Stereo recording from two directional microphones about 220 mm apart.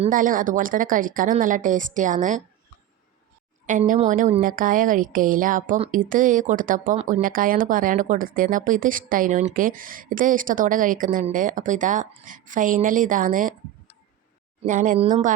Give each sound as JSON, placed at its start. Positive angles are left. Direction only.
{"t": 0.0, "sound": "a woman's voice", "side_deg": -35}
{"t": 3.7, "sound": "a woman's voice", "side_deg": -35}
{"t": 14.7, "sound": "a woman's voice", "side_deg": -35}